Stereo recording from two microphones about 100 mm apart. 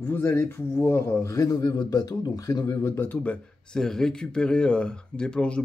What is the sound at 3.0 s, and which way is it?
Speech, 20° left (ahead or behind).